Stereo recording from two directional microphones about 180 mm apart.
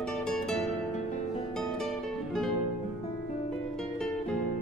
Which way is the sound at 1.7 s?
Centre (ahead or behind).